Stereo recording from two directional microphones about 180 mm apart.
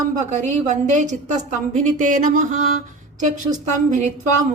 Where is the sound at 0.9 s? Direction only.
45° right (ahead or behind).